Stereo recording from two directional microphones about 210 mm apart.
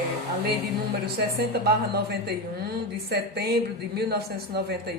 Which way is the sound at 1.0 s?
50° right (ahead or behind).